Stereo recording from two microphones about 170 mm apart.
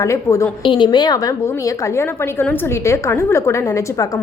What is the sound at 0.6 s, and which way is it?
A woman's voice, 30° left (ahead or behind).